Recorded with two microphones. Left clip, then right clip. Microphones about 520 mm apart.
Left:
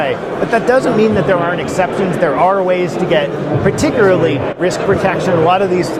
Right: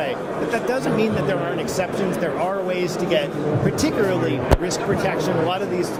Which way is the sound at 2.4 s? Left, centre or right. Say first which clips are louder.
Left 10 dB; left.